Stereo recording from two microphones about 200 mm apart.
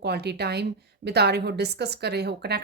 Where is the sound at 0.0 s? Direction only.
55° right (ahead or behind).